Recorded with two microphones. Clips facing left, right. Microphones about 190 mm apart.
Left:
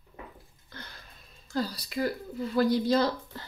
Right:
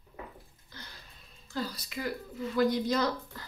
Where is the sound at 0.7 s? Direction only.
55° left (ahead or behind).